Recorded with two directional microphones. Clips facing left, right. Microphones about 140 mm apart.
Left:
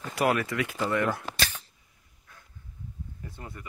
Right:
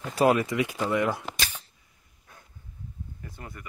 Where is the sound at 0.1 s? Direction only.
25° right (ahead or behind).